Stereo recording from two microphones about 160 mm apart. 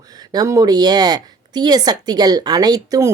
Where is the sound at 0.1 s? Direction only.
25° right (ahead or behind).